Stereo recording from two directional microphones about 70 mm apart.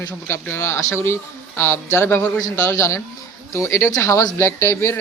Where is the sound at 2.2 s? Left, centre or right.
Left.